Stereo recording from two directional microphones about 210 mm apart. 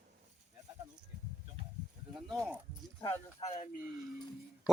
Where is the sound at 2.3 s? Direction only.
10° right (ahead or behind).